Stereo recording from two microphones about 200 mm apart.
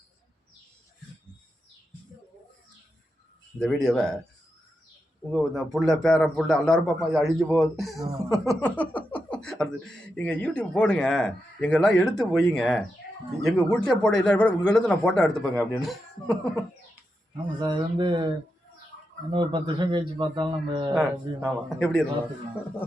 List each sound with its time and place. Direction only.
3.6 s speech: 5° left (ahead or behind)
5.3 s speech: centre (ahead or behind)
17.6 s a man's voice: 25° right (ahead or behind)
19.3 s a man's voice: 25° right (ahead or behind)
20.9 s speech: centre (ahead or behind)